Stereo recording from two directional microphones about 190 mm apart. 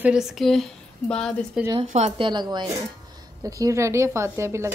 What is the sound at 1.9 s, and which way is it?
Speech, 35° right (ahead or behind).